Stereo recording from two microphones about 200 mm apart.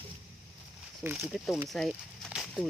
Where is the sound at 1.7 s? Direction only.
Centre (ahead or behind).